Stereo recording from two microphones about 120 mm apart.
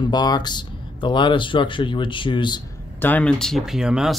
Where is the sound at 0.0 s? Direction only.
35° left (ahead or behind).